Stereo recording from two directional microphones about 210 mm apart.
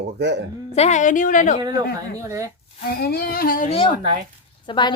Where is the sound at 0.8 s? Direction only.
35° left (ahead or behind).